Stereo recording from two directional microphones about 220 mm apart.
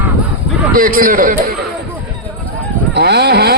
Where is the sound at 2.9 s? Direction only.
50° right (ahead or behind).